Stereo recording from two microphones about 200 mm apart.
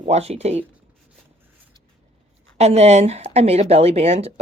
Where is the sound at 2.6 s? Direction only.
35° right (ahead or behind).